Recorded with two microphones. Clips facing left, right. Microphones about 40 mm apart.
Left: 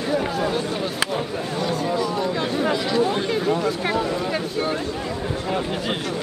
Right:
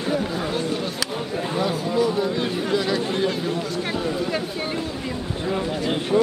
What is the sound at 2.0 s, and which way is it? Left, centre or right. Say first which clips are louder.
Chatter: right 2 dB; centre.